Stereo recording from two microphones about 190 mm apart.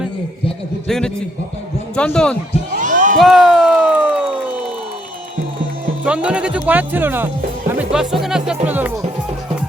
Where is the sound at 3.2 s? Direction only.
Centre (ahead or behind).